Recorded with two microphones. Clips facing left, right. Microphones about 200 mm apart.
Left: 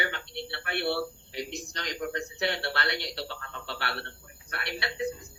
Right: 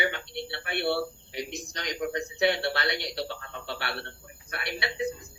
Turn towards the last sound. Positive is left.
turn(degrees=-15)  # may be behind; listen again after turning